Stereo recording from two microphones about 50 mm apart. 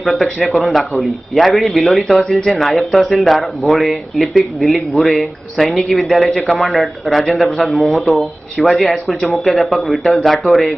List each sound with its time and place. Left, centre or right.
0.2 s a man's voice: centre